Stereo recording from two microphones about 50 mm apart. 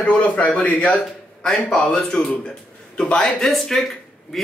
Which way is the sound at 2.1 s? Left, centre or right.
Centre.